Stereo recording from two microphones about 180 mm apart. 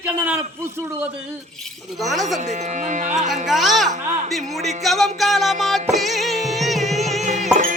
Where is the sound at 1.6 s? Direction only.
Centre (ahead or behind).